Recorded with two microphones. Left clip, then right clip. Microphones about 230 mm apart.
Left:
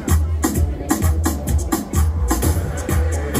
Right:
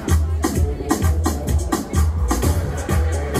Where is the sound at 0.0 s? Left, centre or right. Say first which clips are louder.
Left 1 dB; left.